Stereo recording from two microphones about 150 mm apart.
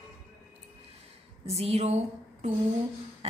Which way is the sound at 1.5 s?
45° right (ahead or behind).